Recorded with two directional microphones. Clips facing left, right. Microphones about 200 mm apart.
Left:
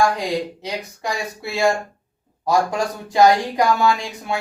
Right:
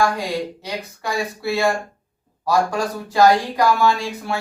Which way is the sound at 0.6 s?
20° left (ahead or behind).